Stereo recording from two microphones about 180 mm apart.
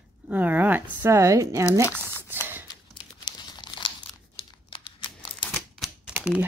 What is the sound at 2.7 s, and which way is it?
Crumpling, 25° left (ahead or behind).